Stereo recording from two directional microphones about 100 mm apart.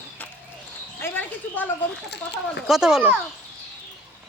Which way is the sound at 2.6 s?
5° right (ahead or behind).